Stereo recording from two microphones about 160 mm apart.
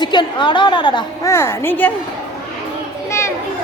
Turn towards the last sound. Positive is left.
turn(degrees=20)  # may be behind; listen again after turning